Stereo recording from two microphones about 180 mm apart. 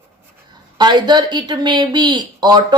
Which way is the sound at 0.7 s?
25° right (ahead or behind).